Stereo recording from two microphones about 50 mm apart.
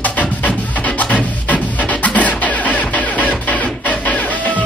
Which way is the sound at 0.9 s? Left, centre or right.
Left.